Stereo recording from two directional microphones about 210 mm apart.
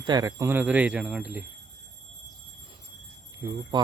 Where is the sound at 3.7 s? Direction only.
20° right (ahead or behind).